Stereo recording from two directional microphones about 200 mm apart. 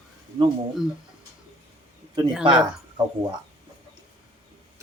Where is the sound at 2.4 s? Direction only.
25° right (ahead or behind).